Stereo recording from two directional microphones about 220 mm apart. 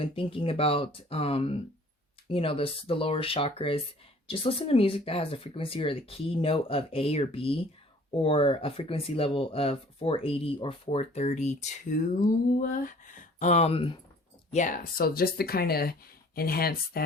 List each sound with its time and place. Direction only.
0.0 s speech: 25° left (ahead or behind)
14.5 s speech: 35° left (ahead or behind)